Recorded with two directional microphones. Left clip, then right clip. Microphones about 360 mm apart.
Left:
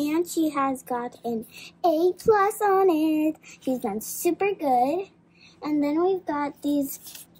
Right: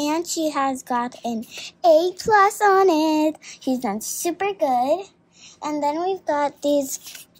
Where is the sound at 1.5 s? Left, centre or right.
Right.